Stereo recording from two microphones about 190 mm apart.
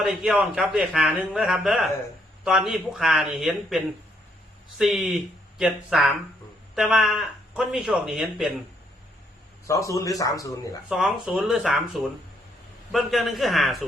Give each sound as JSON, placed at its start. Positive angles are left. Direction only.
{"t": 0.0, "sound": "a man's voice", "side_deg": -5}
{"t": 9.6, "sound": "speech", "side_deg": 15}
{"t": 10.8, "sound": "a man's voice", "side_deg": -5}